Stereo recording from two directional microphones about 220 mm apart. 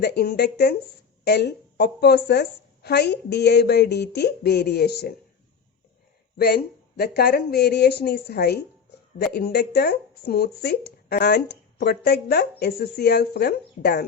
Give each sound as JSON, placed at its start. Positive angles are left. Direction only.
{"t": 0.0, "sound": "speech", "side_deg": 50}
{"t": 6.3, "sound": "speech", "side_deg": 45}